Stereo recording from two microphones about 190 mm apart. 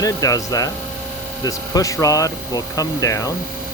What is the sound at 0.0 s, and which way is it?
Speech, 20° left (ahead or behind).